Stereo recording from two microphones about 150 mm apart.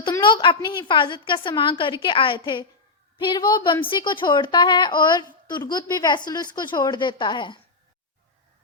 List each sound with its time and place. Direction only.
0.0 s a woman's voice: 30° left (ahead or behind)